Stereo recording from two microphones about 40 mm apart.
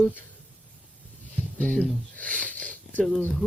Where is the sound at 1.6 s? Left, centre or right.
Left.